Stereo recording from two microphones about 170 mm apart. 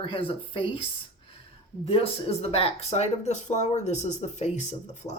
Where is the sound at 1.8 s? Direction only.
35° left (ahead or behind).